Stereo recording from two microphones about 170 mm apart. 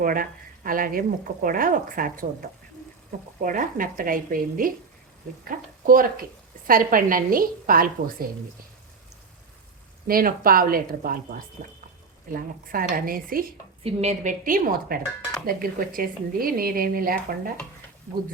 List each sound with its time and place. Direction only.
0.0 s speech: 55° right (ahead or behind)
3.4 s speech: 55° right (ahead or behind)
10.1 s speech: 60° right (ahead or behind)
12.6 s speech: 60° right (ahead or behind)
13.8 s a woman's voice: 40° right (ahead or behind); by 17.5 s 60° right (ahead or behind)